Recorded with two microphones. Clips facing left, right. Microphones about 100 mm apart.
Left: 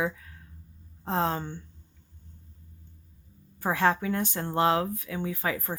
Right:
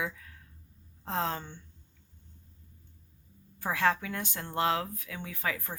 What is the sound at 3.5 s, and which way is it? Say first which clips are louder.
Speech: left 3 dB; 30° left (ahead or behind).